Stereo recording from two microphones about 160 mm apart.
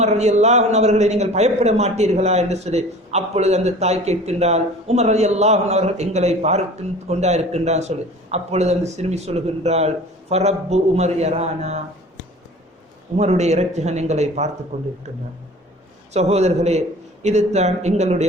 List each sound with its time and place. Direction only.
0.0 s a man's voice: 45° right (ahead or behind)
13.1 s a man's voice: 45° right (ahead or behind)
16.1 s a man's voice: 45° right (ahead or behind)